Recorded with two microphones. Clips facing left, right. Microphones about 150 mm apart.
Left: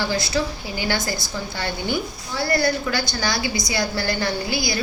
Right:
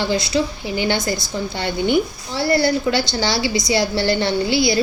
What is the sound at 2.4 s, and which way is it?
A woman's voice, 25° right (ahead or behind).